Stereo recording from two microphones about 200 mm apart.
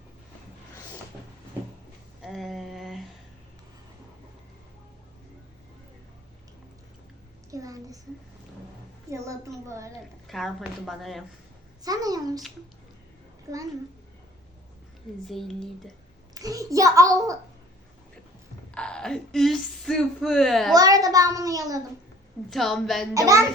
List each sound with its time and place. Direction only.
2.2 s a sound: centre (ahead or behind)
7.5 s a sound: 15° right (ahead or behind)
9.0 s a child's voice: 15° right (ahead or behind)
10.2 s a woman's voice: centre (ahead or behind)
11.9 s a woman's voice: 20° right (ahead or behind)
13.5 s a child's voice: 20° right (ahead or behind)
15.3 s a woman's voice: centre (ahead or behind)
16.3 s a child's voice: 20° right (ahead or behind)
18.7 s a sound: 5° left (ahead or behind)
20.7 s a child's voice: 20° right (ahead or behind)
22.4 s a woman's voice: centre (ahead or behind)
23.1 s a child's voice: 15° right (ahead or behind)